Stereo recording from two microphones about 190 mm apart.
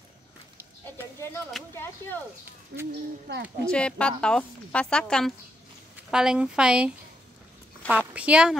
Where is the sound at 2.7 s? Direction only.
55° right (ahead or behind).